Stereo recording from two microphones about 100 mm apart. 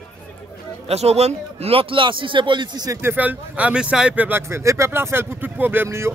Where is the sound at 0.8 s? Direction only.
90° right; by 3.0 s 45° right (ahead or behind).